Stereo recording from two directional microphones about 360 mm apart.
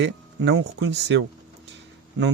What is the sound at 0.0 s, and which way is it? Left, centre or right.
Speech, right.